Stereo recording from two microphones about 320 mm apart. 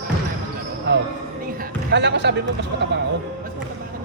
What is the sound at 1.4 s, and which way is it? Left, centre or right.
Music, right.